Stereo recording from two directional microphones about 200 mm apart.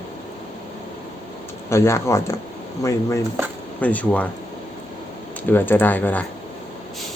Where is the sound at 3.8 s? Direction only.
5° left (ahead or behind).